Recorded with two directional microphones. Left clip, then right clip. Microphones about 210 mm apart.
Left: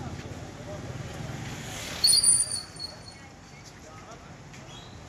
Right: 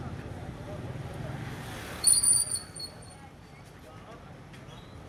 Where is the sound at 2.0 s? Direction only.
45° right (ahead or behind).